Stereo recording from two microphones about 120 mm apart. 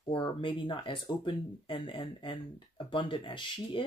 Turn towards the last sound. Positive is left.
turn(degrees=45)  # may be behind; listen again after turning